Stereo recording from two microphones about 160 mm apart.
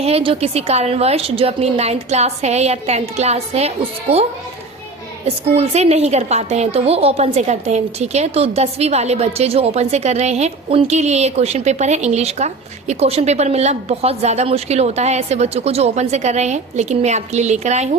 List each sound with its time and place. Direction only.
0.0 s a woman's voice: 35° right (ahead or behind)
5.5 s a woman's voice: 40° right (ahead or behind)